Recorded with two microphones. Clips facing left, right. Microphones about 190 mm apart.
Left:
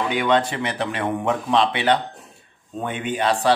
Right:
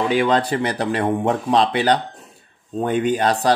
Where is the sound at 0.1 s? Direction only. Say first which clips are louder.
Right 2 dB; 35° right (ahead or behind).